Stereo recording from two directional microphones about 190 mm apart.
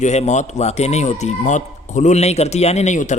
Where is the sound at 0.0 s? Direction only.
35° left (ahead or behind).